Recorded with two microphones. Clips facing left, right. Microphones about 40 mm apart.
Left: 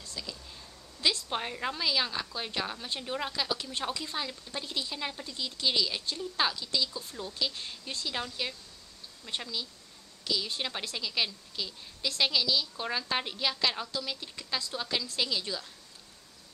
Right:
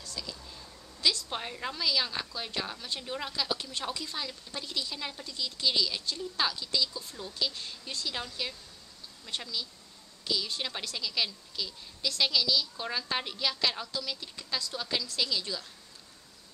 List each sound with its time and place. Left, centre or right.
0.0 s whispering: left
0.3 s whispering: centre
1.3 s a woman's voice: centre